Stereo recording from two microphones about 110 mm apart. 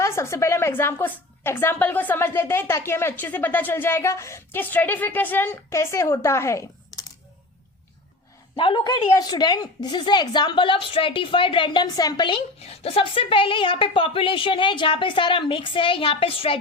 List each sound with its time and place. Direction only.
0.0 s a woman's voice: 25° left (ahead or behind)
8.5 s a woman's voice: 50° left (ahead or behind)
12.5 s a woman's voice: 65° left (ahead or behind)